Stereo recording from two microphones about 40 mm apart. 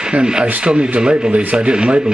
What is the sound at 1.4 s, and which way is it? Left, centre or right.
Speech, right.